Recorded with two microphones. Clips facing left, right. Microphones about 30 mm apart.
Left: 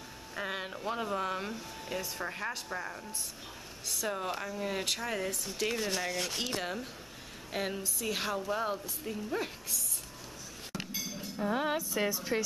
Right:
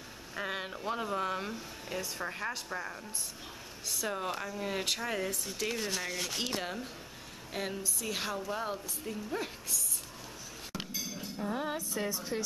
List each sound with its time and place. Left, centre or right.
0.4 s speech: centre
4.0 s a woman's voice: centre
11.1 s chink: centre
11.5 s a woman's voice: left
12.3 s speech: left